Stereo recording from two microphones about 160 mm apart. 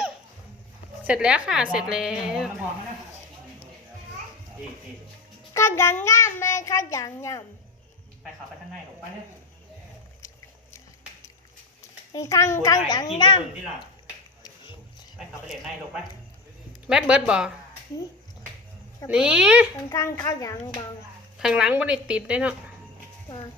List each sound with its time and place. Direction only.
1.1 s a woman's voice: 5° right (ahead or behind)
5.5 s child singing: 15° left (ahead or behind)
12.1 s a child's voice: 20° left (ahead or behind)
16.8 s a woman's voice: 5° right (ahead or behind)
19.0 s speech: 5° right (ahead or behind)
19.9 s a child's voice: 20° left (ahead or behind)
21.3 s a woman's voice: 5° right (ahead or behind)